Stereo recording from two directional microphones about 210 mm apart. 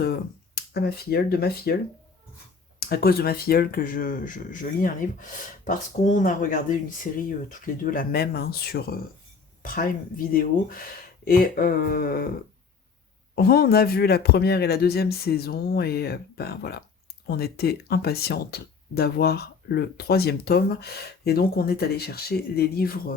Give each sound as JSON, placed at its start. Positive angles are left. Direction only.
{"t": 0.0, "sound": "speech", "side_deg": 50}
{"t": 2.8, "sound": "speech", "side_deg": 45}
{"t": 10.3, "sound": "speech", "side_deg": 45}
{"t": 13.3, "sound": "speech", "side_deg": 45}